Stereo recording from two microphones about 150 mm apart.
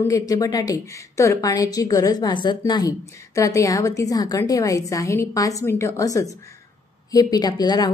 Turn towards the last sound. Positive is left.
turn(degrees=25)  # may be behind; listen again after turning